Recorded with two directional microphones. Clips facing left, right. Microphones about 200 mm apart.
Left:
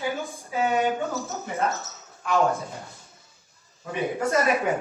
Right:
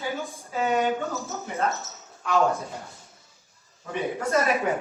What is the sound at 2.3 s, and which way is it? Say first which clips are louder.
Speech: even; 15° left (ahead or behind).